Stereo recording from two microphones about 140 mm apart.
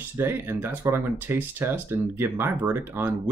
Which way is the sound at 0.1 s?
15° right (ahead or behind).